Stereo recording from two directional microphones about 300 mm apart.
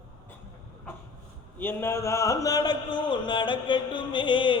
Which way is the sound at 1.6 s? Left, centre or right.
Centre.